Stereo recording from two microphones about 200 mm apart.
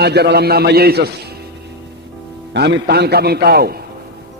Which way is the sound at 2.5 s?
55° right (ahead or behind).